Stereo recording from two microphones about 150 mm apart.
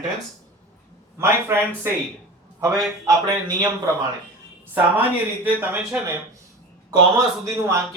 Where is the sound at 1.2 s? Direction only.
15° right (ahead or behind).